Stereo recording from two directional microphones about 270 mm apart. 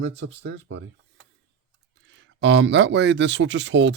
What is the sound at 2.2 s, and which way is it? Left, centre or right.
Speech, right.